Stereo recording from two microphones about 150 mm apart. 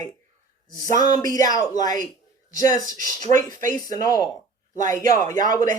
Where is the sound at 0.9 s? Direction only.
25° left (ahead or behind).